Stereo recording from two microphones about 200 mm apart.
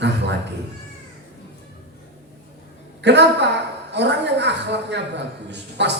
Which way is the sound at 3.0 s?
60° right (ahead or behind).